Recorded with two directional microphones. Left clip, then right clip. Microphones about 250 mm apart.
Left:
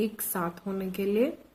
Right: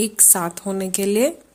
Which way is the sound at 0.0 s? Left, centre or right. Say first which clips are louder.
Right 10 dB; right.